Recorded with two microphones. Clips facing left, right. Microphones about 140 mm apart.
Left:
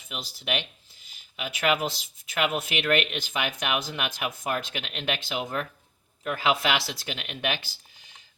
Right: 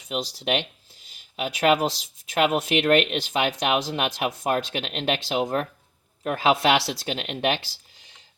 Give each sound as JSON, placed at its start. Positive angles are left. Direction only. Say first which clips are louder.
{"t": 0.3, "sound": "speech", "louder": "right 1 dB", "side_deg": -30}